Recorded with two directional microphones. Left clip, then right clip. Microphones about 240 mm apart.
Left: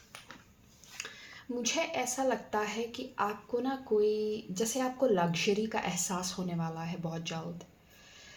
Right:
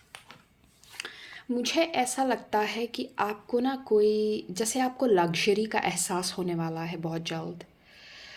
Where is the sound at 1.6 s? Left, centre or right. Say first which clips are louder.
Right 6 dB; right.